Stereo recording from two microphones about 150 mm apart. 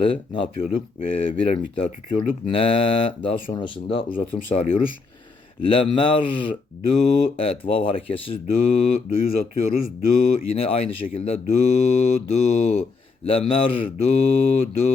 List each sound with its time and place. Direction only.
0.0 s mantra: 35° left (ahead or behind)
4.1 s mantra: 50° left (ahead or behind)
13.2 s mantra: 40° left (ahead or behind)